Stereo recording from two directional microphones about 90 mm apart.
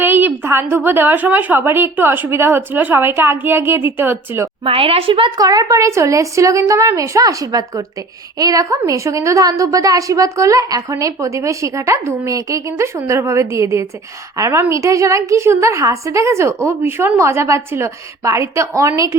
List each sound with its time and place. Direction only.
0.0 s a woman's voice: 20° right (ahead or behind)
4.6 s a woman's voice: 90° right
5.4 s a woman's voice: 45° right (ahead or behind)